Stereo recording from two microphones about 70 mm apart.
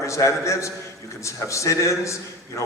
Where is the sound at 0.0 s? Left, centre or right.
Left.